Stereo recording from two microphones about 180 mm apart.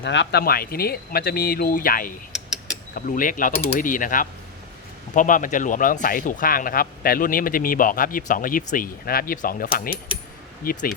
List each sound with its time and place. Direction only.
0.0 s speech: 80° left; by 2.1 s 50° left (ahead or behind)
2.3 s mechanisms: 5° right (ahead or behind)
2.9 s speech: 50° left (ahead or behind)